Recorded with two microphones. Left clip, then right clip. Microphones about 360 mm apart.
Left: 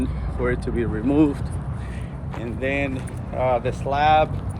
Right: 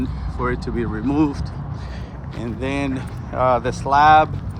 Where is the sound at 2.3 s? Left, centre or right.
Centre.